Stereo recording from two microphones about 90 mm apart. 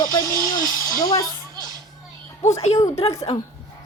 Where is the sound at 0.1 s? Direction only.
35° left (ahead or behind).